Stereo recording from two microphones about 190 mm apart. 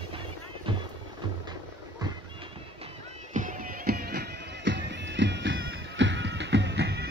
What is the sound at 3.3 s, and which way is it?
Music, 45° right (ahead or behind).